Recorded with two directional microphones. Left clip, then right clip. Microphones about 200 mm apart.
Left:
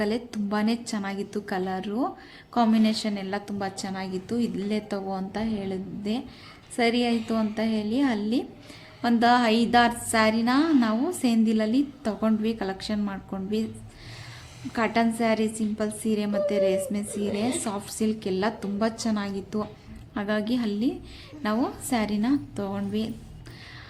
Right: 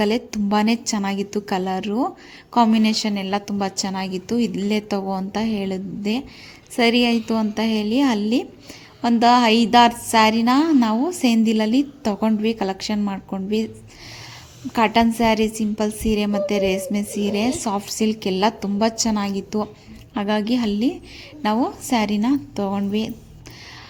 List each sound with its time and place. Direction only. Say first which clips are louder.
0.0 s a woman's voice: right 7 dB; 30° right (ahead or behind)
14.7 s a woman's voice: right 7 dB; 30° right (ahead or behind)